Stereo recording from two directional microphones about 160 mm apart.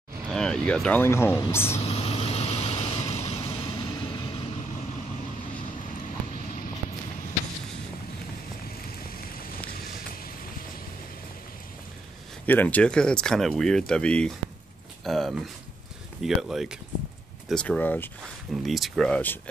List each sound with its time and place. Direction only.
0.3 s speech: 5° left (ahead or behind)
1.8 s vehicle: 40° left (ahead or behind)
9.7 s vehicle: 70° left (ahead or behind)
12.4 s speech: 10° left (ahead or behind)
15.0 s a sound: centre (ahead or behind)
16.2 s speech: centre (ahead or behind)
18.5 s speech: centre (ahead or behind)